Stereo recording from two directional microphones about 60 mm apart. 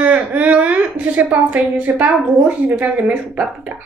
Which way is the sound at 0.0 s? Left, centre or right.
Right.